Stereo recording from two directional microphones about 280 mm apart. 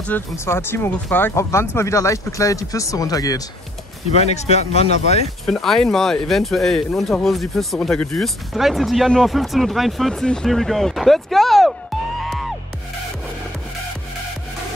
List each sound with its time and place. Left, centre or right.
0.0 s speech: centre
4.1 s speech: left
5.4 s speech: centre
12.2 s music: centre